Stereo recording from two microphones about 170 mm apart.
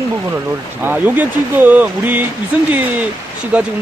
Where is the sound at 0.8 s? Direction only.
10° right (ahead or behind).